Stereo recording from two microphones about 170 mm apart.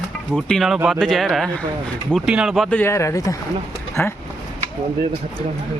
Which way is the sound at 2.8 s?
15° left (ahead or behind).